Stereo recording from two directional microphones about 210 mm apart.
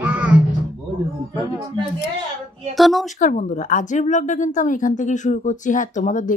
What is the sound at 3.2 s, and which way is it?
Speech, 40° left (ahead or behind).